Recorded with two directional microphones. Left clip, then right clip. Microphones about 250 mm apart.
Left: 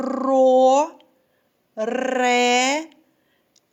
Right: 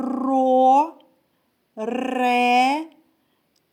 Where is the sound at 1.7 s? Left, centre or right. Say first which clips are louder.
Left 3 dB; centre.